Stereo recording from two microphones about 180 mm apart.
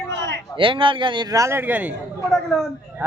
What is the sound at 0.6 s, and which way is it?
A man's voice, 30° right (ahead or behind).